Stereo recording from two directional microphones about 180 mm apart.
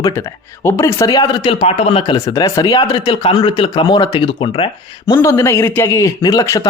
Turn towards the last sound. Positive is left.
turn(degrees=20)  # may be behind; listen again after turning